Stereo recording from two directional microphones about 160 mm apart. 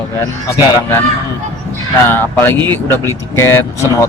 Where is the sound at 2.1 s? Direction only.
15° left (ahead or behind).